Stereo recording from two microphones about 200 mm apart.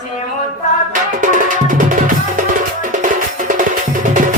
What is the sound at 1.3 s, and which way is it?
Music, 40° right (ahead or behind).